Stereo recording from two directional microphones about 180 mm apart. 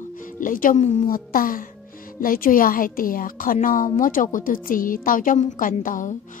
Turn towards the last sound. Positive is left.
turn(degrees=45)  # may be behind; listen again after turning